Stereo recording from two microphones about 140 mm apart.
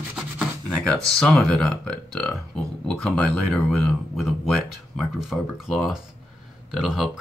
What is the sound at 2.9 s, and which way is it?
Speech, centre (ahead or behind).